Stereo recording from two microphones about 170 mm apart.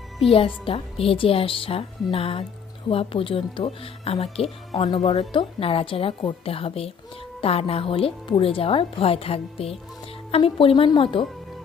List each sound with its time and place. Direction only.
0.2 s speech: 35° left (ahead or behind)